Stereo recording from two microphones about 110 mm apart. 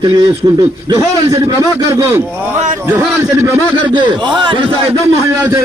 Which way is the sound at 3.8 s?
45° right (ahead or behind).